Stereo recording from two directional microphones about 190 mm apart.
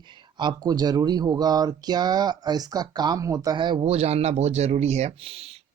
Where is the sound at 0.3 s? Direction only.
20° right (ahead or behind).